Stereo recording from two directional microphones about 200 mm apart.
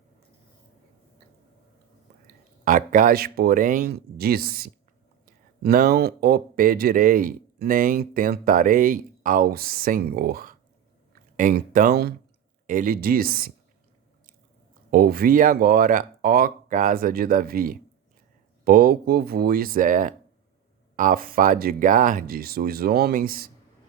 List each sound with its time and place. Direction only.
2.6 s speech: 40° right (ahead or behind)
14.8 s speech: 50° right (ahead or behind)